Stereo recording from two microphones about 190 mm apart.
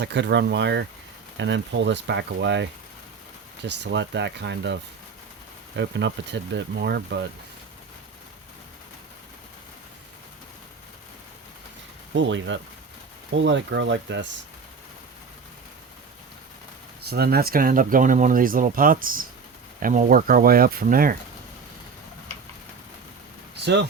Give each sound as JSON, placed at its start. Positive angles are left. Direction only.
{"t": 0.0, "sound": "speech", "side_deg": -65}
{"t": 12.1, "sound": "speech", "side_deg": -75}
{"t": 17.1, "sound": "speech", "side_deg": -55}